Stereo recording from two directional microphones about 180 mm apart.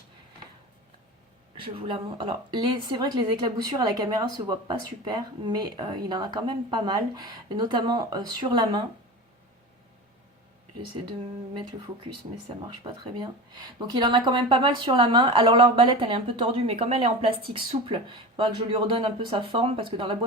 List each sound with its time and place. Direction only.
1.5 s speech: 30° right (ahead or behind)
12.8 s speech: 25° right (ahead or behind)